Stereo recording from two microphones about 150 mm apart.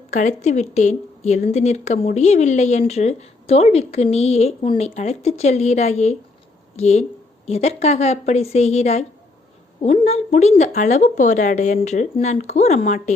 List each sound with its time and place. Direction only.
0.1 s a woman's voice: 50° left (ahead or behind)